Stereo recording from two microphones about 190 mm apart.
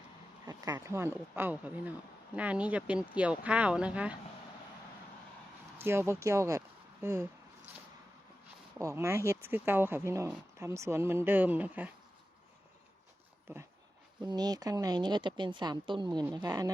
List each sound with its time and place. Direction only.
0.4 s speech: 20° right (ahead or behind)
5.8 s speech: 15° right (ahead or behind)
7.0 s a sound: 15° right (ahead or behind)
8.8 s speech: 15° right (ahead or behind)
14.2 s speech: 20° right (ahead or behind)